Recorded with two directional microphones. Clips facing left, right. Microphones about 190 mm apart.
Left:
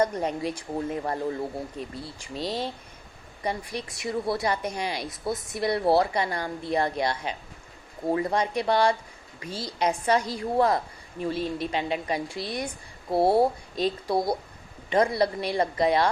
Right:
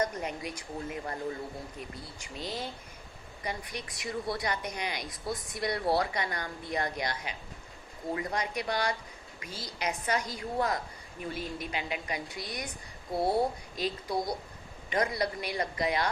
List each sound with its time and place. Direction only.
0.0 s a woman's voice: 30° left (ahead or behind)